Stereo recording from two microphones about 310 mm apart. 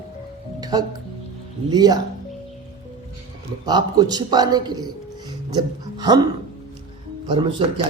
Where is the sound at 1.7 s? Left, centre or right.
Centre.